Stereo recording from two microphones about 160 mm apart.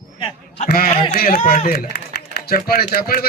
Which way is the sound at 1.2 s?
60° left (ahead or behind).